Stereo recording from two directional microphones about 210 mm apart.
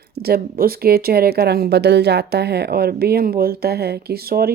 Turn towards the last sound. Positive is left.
turn(degrees=-45)  # may be behind; listen again after turning